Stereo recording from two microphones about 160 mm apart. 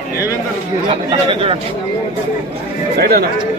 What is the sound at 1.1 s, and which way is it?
Speech, 35° right (ahead or behind).